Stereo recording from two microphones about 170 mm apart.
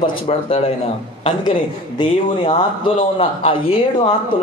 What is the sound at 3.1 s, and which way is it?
Speech, 35° left (ahead or behind).